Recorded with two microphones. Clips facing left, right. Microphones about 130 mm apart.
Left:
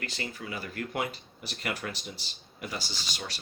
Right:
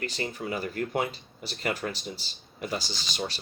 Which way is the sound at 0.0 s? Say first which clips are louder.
Right 5 dB; 30° right (ahead or behind).